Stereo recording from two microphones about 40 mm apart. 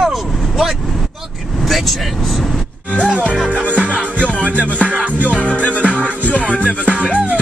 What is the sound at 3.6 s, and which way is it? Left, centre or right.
Music, right.